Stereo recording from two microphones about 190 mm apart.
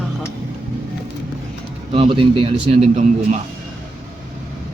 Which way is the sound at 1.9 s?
30° right (ahead or behind).